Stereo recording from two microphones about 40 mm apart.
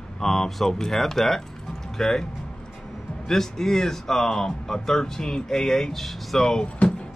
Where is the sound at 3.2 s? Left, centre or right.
Centre.